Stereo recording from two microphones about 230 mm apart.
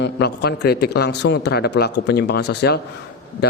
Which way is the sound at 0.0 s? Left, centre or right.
Left.